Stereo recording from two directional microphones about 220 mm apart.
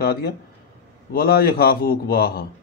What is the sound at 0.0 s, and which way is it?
Speech, 45° left (ahead or behind).